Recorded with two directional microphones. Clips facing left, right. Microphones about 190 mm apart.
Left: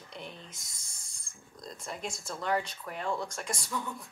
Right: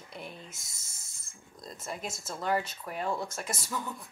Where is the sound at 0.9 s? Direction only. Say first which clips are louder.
Even; 25° right (ahead or behind).